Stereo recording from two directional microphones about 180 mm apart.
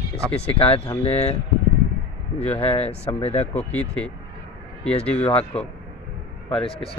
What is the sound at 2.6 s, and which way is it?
Speech, 35° left (ahead or behind).